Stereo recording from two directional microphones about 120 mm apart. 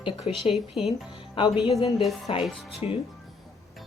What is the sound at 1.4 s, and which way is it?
A woman's voice, 45° left (ahead or behind).